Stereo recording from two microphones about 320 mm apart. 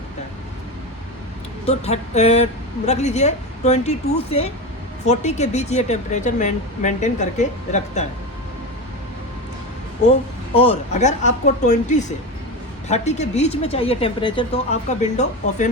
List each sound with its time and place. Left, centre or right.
1.6 s a woman's voice: centre
10.6 s a woman's voice: centre